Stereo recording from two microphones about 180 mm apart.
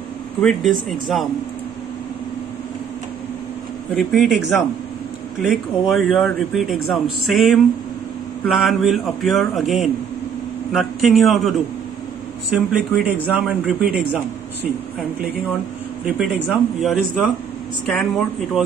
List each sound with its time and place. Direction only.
0.4 s speech: centre (ahead or behind)
3.9 s speech: centre (ahead or behind)
12.5 s speech: 5° right (ahead or behind)
16.1 s speech: centre (ahead or behind)